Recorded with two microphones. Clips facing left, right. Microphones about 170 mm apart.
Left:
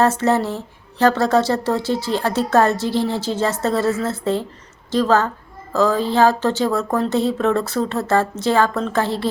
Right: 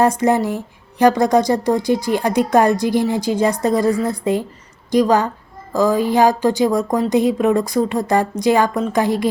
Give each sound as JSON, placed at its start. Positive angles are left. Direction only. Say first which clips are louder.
{"t": 0.0, "sound": "speech", "louder": "right 2 dB", "side_deg": -15}